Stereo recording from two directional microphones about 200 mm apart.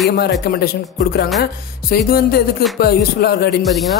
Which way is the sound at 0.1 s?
50° left (ahead or behind).